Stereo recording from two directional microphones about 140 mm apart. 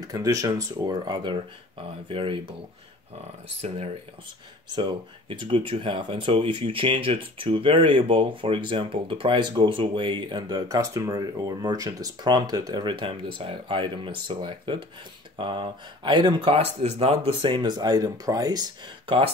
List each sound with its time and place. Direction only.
0.1 s speech: 25° right (ahead or behind)
4.7 s speech: 35° right (ahead or behind)